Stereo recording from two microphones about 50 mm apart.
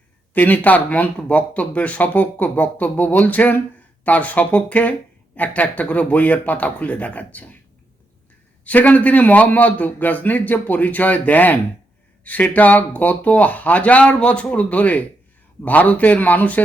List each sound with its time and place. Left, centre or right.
0.3 s speech: left
8.6 s speech: left